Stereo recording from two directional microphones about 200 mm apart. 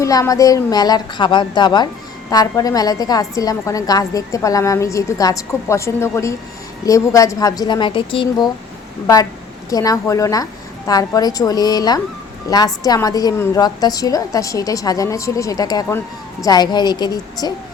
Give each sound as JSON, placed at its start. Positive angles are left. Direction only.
{"t": 0.0, "sound": "a woman's voice", "side_deg": 15}
{"t": 9.6, "sound": "a woman's voice", "side_deg": 15}